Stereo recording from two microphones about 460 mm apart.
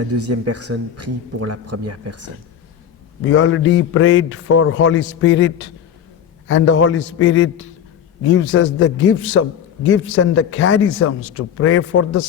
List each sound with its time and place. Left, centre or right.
0.0 s a man's voice: right
3.2 s a man's voice: left